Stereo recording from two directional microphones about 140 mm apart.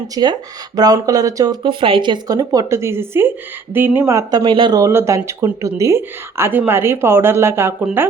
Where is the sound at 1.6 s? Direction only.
35° right (ahead or behind).